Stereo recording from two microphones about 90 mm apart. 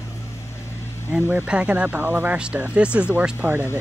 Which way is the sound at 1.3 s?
15° right (ahead or behind).